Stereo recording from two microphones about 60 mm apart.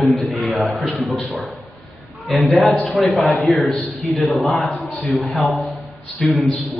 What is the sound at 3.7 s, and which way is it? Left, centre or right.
Speech, left.